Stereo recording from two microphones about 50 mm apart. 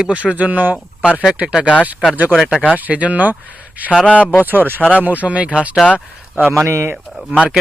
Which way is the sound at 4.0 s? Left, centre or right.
Left.